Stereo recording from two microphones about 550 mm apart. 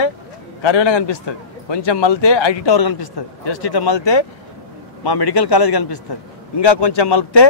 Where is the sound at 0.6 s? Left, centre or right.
Left.